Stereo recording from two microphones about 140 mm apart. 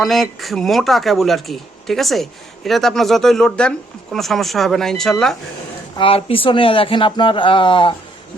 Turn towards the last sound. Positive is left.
turn(degrees=35)  # may be behind; listen again after turning